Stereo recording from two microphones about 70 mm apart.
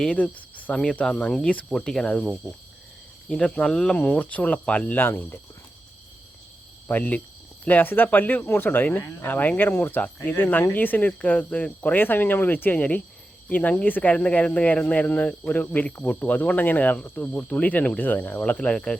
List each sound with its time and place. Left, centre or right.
0.0 s speech: centre
0.8 s speech: centre
3.4 s speech: centre; by 5.4 s left
6.8 s speech: left